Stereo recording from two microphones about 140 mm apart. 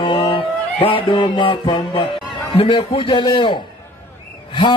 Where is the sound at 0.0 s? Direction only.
35° left (ahead or behind).